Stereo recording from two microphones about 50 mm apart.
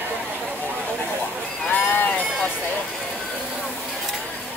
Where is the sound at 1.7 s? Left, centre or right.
Left.